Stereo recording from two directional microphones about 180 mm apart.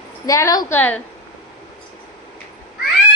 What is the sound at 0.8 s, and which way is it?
Speech, 10° left (ahead or behind).